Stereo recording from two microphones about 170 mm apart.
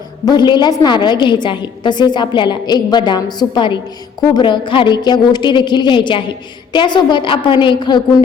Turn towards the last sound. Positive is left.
turn(degrees=25)  # may be behind; listen again after turning